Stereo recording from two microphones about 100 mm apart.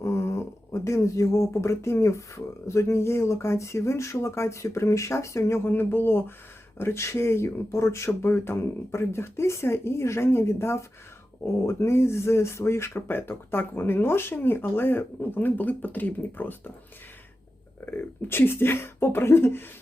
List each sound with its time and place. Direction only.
0.0 s speech: 25° left (ahead or behind)
17.8 s speech: 20° left (ahead or behind)